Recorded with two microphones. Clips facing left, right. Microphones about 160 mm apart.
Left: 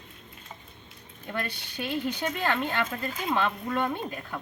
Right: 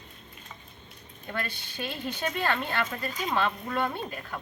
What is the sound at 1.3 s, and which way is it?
Speech, 15° left (ahead or behind).